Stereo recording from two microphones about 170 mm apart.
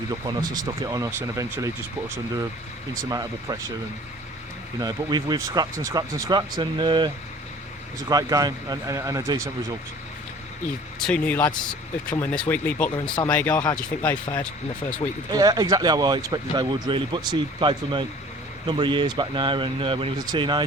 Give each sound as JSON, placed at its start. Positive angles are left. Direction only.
{"t": 0.4, "sound": "speech", "side_deg": -25}
{"t": 3.0, "sound": "speech", "side_deg": -20}
{"t": 4.8, "sound": "speech", "side_deg": -25}
{"t": 11.0, "sound": "speech", "side_deg": 5}
{"t": 12.9, "sound": "speech", "side_deg": 25}
{"t": 13.3, "sound": "speech", "side_deg": 5}
{"t": 15.3, "sound": "speech", "side_deg": -20}